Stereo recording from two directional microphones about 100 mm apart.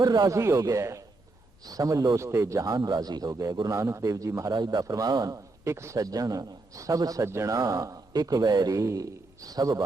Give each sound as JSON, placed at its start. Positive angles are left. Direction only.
{"t": 0.0, "sound": "a man's voice", "side_deg": -45}
{"t": 0.3, "sound": "speech", "side_deg": -30}
{"t": 3.8, "sound": "speech", "side_deg": -30}
{"t": 4.5, "sound": "a man's voice", "side_deg": -50}
{"t": 5.6, "sound": "speech", "side_deg": -30}